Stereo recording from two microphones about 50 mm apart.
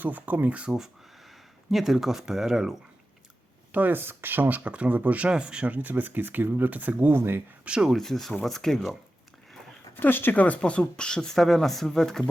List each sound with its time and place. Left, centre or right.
0.0 s speech: right
0.4 s speech: right
1.7 s speech: centre
3.7 s speech: right
5.3 s speech: centre
5.7 s speech: right
7.1 s speech: right
7.6 s speech: centre
7.9 s speech: centre
9.9 s speech: left
10.3 s speech: left; by 12.2 s centre